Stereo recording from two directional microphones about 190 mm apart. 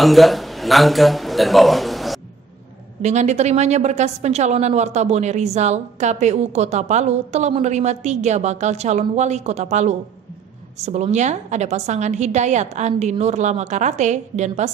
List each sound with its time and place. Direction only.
0.0 s a man's voice: centre (ahead or behind)
3.0 s a woman's voice: 35° right (ahead or behind)